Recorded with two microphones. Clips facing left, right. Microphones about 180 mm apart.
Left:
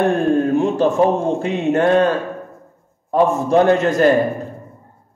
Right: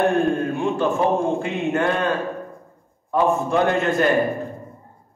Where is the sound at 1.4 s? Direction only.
35° left (ahead or behind).